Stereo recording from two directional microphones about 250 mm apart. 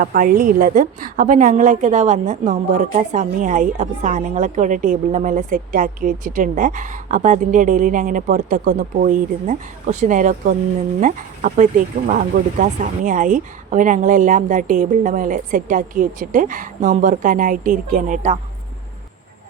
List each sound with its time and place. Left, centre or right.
0.0 s a woman's voice: right